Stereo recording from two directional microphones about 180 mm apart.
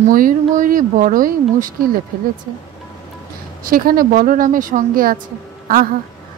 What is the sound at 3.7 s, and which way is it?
A woman's voice, 55° right (ahead or behind).